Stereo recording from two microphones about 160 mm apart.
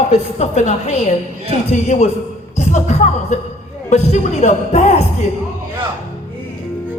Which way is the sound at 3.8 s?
45° left (ahead or behind).